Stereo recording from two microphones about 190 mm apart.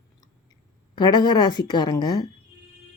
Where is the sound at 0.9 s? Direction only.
20° left (ahead or behind).